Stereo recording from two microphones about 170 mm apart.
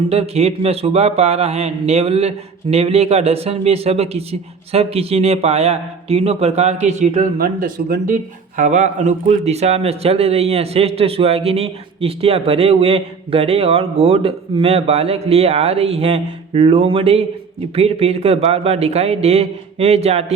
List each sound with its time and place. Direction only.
0.1 s speech: 35° right (ahead or behind)
7.3 s speech: 60° right (ahead or behind)
8.1 s speech: 45° right (ahead or behind)